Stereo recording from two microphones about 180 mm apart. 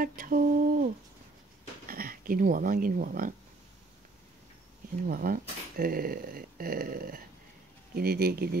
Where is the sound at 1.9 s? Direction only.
55° right (ahead or behind).